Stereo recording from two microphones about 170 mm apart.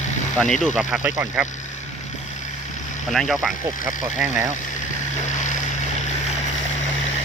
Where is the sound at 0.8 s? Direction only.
10° right (ahead or behind).